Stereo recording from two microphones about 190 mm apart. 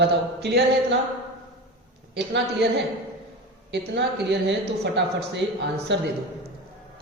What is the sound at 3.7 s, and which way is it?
A man's voice, 65° right (ahead or behind).